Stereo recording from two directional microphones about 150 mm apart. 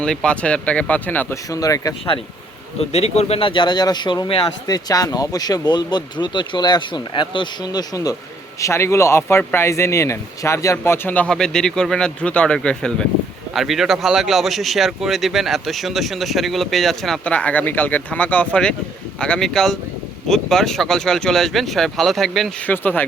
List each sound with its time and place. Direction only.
0.0 s a man's voice: 5° left (ahead or behind)
1.5 s a man's voice: 25° left (ahead or behind)
2.9 s a man's voice: 45° left (ahead or behind); by 23.0 s 15° left (ahead or behind)